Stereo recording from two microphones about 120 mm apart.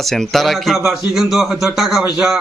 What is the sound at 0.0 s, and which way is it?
A man's voice, centre (ahead or behind).